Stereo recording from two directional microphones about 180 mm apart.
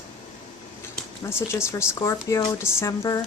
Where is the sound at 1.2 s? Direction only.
15° left (ahead or behind).